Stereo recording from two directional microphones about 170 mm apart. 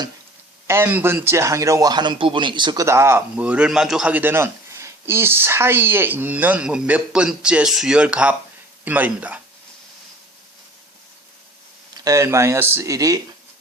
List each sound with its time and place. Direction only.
0.7 s a man's voice: 15° right (ahead or behind)
11.9 s a man's voice: 20° right (ahead or behind)